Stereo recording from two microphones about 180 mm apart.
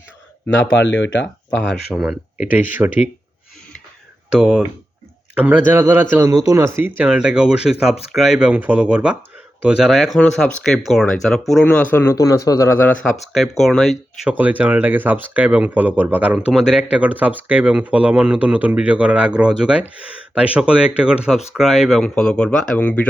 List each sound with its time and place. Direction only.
0.7 s speech: 90° left
1.9 s speech: 5° right (ahead or behind)
4.3 s a man's voice: 5° right (ahead or behind); by 13.0 s 10° left (ahead or behind)
13.3 s speech: centre (ahead or behind)